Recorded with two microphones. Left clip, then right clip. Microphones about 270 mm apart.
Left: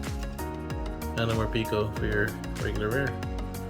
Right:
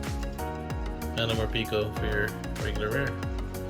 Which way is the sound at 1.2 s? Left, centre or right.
Left.